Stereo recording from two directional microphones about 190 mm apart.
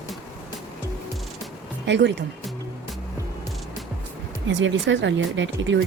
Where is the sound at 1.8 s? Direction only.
70° right (ahead or behind).